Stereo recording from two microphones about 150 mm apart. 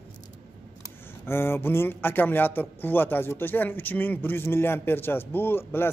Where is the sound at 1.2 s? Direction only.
15° left (ahead or behind).